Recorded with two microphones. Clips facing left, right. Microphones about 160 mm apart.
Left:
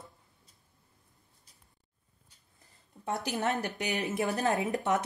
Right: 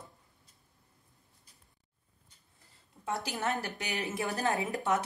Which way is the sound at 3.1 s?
20° left (ahead or behind).